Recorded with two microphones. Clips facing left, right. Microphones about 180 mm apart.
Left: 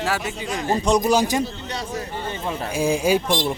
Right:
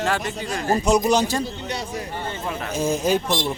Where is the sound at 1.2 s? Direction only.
15° left (ahead or behind).